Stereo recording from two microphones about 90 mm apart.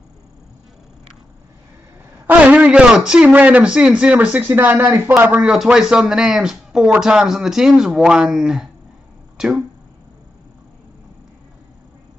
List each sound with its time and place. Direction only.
2.2 s a man's voice: 15° right (ahead or behind)
5.4 s speech: 5° right (ahead or behind)